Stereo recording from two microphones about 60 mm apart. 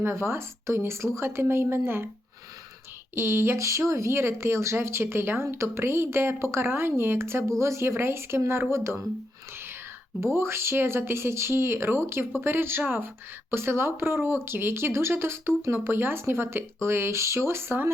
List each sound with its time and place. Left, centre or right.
0.0 s speech: right
3.2 s speech: right
10.3 s speech: right